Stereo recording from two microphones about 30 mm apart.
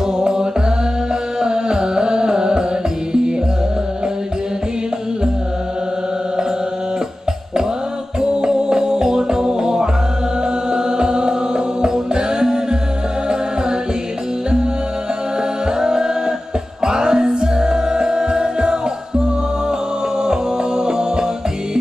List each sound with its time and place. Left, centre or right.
0.2 s music: right
8.2 s music: right
15.8 s music: right
20.2 s music: right